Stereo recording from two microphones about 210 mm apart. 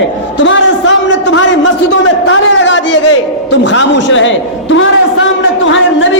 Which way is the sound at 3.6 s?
60° left (ahead or behind).